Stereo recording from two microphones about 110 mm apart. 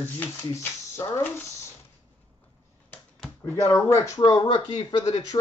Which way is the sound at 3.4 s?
25° left (ahead or behind).